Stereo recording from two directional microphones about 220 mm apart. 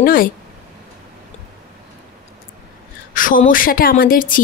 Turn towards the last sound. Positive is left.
turn(degrees=40)  # may be behind; listen again after turning